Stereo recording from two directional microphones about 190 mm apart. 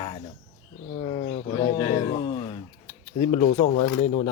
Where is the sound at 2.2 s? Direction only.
25° left (ahead or behind).